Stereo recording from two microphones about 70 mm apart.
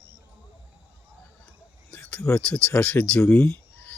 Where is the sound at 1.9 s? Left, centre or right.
Centre.